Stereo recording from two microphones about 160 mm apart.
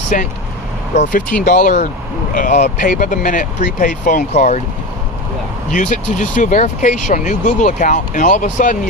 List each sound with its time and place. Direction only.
0.1 s speech: 55° left (ahead or behind)
5.7 s speech: 50° left (ahead or behind)